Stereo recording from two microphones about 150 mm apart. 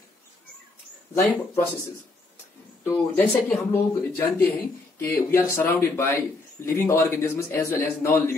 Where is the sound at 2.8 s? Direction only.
15° left (ahead or behind).